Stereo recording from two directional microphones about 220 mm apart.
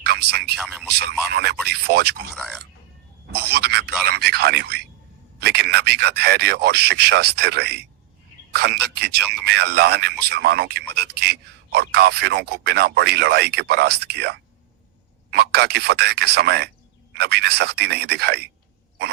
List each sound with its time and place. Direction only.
0.0 s a sound: 50° right (ahead or behind)
1.3 s speech: 50° right (ahead or behind)
2.3 s speech: 5° left (ahead or behind)
3.3 s speech: 50° right (ahead or behind)